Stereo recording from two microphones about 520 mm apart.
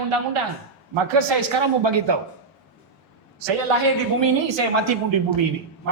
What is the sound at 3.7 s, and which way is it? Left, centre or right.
Speech, right.